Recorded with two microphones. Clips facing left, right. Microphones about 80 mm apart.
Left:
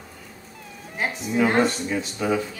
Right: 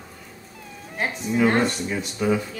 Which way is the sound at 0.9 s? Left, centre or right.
Centre.